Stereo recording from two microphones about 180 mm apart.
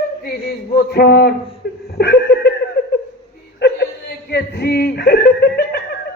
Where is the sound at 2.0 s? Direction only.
65° left (ahead or behind).